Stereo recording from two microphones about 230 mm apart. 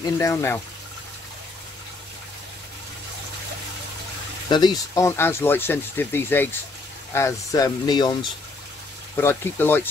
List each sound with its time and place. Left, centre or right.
0.0 s speech: centre
4.5 s speech: centre